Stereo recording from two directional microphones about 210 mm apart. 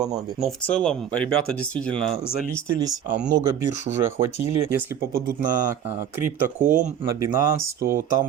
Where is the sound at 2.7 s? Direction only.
15° right (ahead or behind).